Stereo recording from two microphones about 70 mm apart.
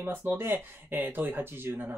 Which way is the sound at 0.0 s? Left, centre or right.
Right.